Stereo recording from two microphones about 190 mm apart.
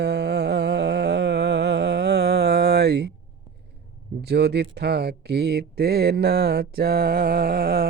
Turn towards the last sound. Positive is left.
turn(degrees=-50)  # may be behind; listen again after turning